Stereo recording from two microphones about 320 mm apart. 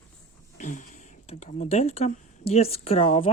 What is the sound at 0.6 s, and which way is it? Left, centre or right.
Speech, left.